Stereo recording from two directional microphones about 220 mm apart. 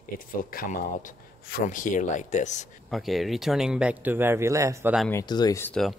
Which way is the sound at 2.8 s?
Centre (ahead or behind).